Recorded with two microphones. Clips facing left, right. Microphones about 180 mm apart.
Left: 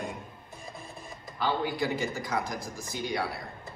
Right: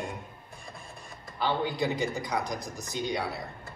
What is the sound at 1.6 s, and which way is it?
Speech, 20° right (ahead or behind).